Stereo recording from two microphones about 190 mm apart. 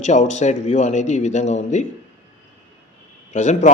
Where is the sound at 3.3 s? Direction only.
40° left (ahead or behind).